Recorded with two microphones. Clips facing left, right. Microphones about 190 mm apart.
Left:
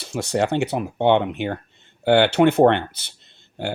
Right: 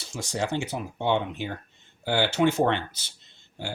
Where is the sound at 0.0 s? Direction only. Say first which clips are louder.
Left 8 dB; 65° left (ahead or behind).